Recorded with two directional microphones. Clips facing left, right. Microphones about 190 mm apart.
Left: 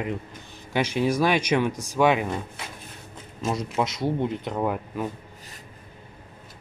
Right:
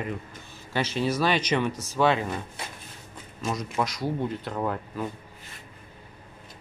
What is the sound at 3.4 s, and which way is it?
Speech, 25° left (ahead or behind).